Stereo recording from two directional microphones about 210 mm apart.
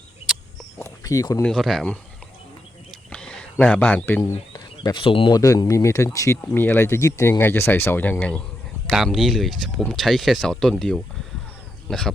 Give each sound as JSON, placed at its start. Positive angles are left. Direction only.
{"t": 0.8, "sound": "speech", "side_deg": 15}
{"t": 1.5, "sound": "speech", "side_deg": 0}
{"t": 3.1, "sound": "speech", "side_deg": 5}